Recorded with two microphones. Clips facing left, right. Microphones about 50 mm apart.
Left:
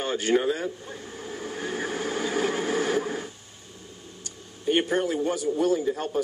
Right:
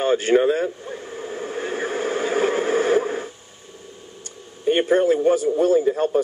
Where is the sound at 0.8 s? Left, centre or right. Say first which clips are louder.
Right 6 dB; right.